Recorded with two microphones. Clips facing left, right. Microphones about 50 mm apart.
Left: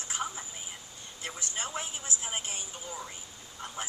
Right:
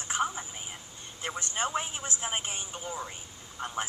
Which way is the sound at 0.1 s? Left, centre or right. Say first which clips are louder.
Right 6 dB; right.